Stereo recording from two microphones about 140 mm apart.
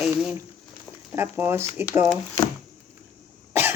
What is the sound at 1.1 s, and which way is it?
Speech, 15° right (ahead or behind).